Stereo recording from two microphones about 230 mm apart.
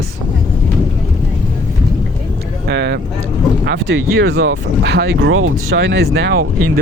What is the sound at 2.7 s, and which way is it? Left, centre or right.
Speech, right.